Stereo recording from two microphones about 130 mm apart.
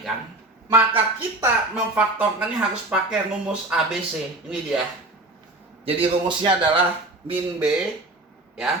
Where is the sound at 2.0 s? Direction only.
10° right (ahead or behind).